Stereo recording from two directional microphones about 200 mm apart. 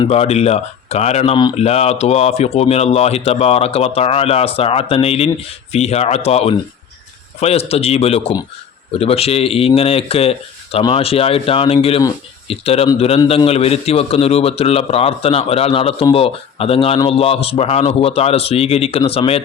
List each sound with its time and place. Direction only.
0.0 s speech: 30° left (ahead or behind)